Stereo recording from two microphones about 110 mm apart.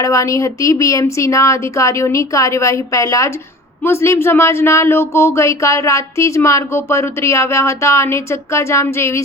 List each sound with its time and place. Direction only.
0.0 s speech: 30° left (ahead or behind)